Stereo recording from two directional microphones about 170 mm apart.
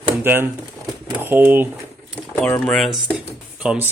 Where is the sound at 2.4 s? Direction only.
10° left (ahead or behind).